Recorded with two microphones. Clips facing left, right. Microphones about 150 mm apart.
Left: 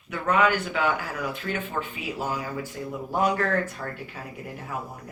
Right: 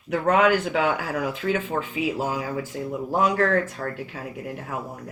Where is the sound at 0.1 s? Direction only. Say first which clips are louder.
Right 4 dB; 75° right (ahead or behind).